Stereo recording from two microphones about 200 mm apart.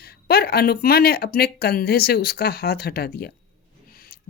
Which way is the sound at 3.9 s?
50° left (ahead or behind).